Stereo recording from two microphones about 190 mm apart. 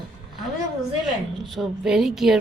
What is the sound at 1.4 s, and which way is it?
Speech, centre (ahead or behind).